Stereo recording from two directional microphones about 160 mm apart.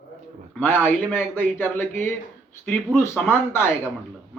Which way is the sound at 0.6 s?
10° left (ahead or behind).